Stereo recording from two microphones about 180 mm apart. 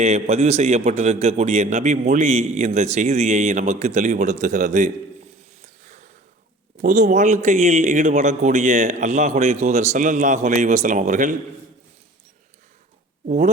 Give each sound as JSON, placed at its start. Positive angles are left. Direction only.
{"t": 0.0, "sound": "a man's voice", "side_deg": -40}
{"t": 5.6, "sound": "a sound", "side_deg": -40}
{"t": 6.7, "sound": "a man's voice", "side_deg": -45}
{"t": 13.2, "sound": "a man's voice", "side_deg": -40}